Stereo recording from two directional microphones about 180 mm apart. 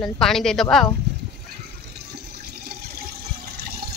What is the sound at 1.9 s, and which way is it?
Water, 60° right (ahead or behind).